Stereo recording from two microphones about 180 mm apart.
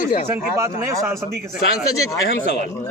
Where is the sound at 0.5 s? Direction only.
15° right (ahead or behind).